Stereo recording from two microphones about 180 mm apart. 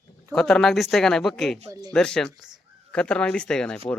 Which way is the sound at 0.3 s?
5° left (ahead or behind).